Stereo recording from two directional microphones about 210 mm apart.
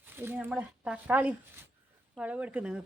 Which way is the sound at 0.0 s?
10° right (ahead or behind).